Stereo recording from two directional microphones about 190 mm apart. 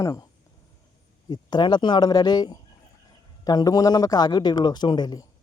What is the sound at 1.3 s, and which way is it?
Speech, 20° left (ahead or behind).